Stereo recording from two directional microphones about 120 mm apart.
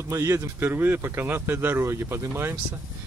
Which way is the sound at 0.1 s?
25° right (ahead or behind).